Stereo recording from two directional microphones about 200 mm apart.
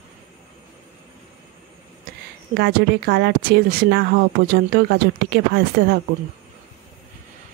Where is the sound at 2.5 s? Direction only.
50° right (ahead or behind).